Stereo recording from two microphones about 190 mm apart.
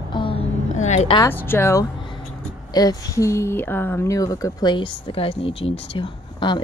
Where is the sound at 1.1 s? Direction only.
15° left (ahead or behind).